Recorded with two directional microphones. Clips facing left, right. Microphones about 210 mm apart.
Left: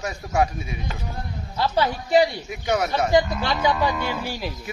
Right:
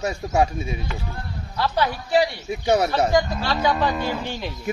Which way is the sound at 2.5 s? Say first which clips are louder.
Right 3 dB; 30° right (ahead or behind).